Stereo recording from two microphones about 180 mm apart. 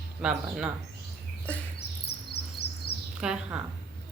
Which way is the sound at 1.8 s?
65° left (ahead or behind).